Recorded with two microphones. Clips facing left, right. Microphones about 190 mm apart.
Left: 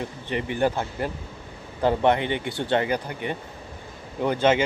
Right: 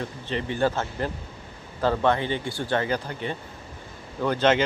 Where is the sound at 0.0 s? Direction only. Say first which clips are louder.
Left 1 dB; 15° left (ahead or behind).